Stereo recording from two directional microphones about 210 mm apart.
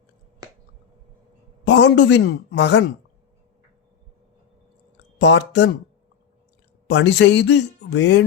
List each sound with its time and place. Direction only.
1.6 s speech: 55° left (ahead or behind)
5.1 s a man's voice: 55° left (ahead or behind)
6.8 s a man's voice: 55° left (ahead or behind)